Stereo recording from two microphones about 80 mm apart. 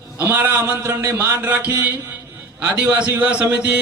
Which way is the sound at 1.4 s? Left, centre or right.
Right.